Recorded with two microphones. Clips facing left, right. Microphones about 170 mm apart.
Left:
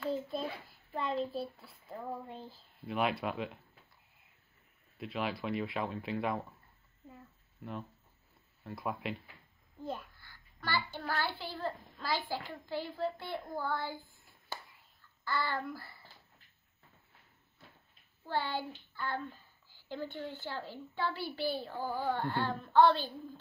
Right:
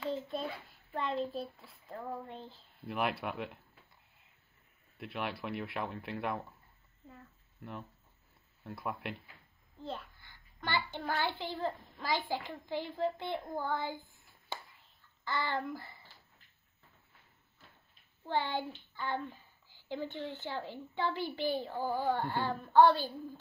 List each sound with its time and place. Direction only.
0.9 s a woman's voice: 5° left (ahead or behind)
1.9 s a sound: 10° left (ahead or behind)
2.9 s speech: centre (ahead or behind)
4.9 s speech: centre (ahead or behind)
8.6 s speech: centre (ahead or behind)
9.8 s a sound: 10° left (ahead or behind)
10.2 s child singing: 20° right (ahead or behind)
15.2 s child singing: 20° right (ahead or behind)
18.2 s a woman's voice: 20° right (ahead or behind)